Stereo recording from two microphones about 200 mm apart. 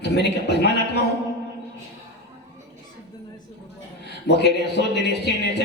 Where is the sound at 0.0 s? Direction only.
55° left (ahead or behind).